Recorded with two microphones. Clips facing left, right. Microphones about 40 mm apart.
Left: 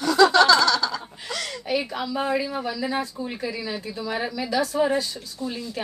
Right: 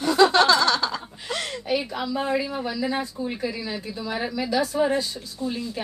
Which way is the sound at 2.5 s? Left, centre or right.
Centre.